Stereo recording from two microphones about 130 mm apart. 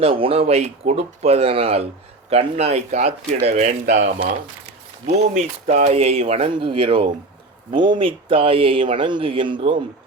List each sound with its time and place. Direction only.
0.0 s speech: 45° right (ahead or behind); by 5.9 s 65° right (ahead or behind)
5.9 s speech: 50° right (ahead or behind)